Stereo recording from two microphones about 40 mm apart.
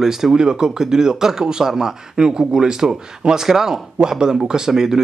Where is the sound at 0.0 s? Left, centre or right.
Centre.